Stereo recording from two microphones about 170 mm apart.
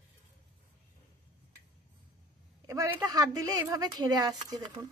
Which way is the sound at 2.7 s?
20° right (ahead or behind).